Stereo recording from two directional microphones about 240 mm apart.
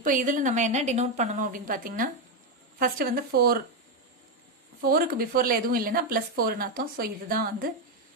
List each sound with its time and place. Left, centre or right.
0.0 s speech: right
4.8 s speech: right